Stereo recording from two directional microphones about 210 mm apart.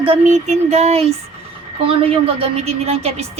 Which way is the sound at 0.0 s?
30° right (ahead or behind).